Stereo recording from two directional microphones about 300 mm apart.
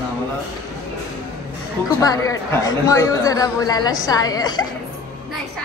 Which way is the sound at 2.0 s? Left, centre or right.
Centre.